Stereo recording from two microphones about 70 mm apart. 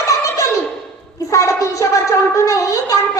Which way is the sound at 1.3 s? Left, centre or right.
Left.